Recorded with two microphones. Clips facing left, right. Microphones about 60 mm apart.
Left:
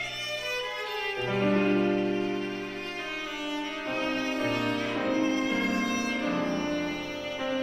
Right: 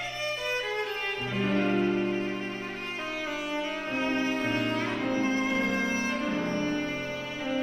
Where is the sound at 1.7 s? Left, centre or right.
Left.